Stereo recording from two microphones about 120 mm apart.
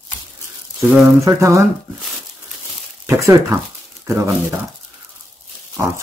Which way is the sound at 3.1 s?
25° right (ahead or behind).